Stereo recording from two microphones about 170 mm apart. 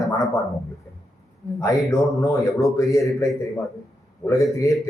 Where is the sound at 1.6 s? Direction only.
20° left (ahead or behind).